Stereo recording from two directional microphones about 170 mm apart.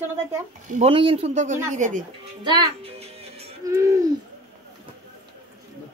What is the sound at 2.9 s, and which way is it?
Music, 35° right (ahead or behind).